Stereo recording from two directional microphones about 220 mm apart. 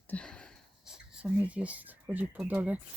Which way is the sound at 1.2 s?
5° right (ahead or behind).